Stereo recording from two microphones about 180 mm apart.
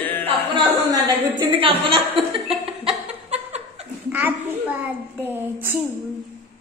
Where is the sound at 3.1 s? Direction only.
35° right (ahead or behind).